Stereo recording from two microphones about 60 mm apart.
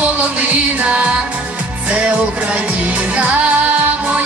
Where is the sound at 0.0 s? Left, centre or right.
Right.